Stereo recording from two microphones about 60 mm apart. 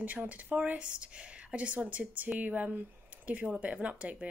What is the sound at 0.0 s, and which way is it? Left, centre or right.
Speech, right.